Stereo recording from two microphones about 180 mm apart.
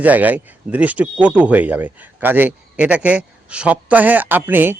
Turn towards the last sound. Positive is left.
turn(degrees=-10)  # may be behind; listen again after turning